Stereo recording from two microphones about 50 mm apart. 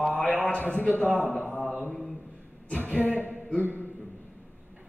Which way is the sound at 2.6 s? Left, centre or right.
Left.